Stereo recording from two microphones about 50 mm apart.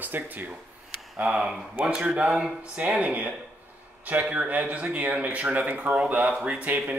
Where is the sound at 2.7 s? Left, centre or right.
Right.